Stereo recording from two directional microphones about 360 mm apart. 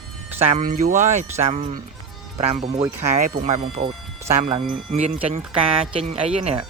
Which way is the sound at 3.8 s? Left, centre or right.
Centre.